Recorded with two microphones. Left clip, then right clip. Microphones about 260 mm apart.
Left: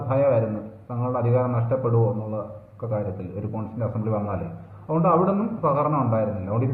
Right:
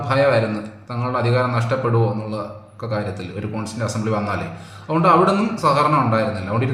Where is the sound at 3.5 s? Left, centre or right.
Right.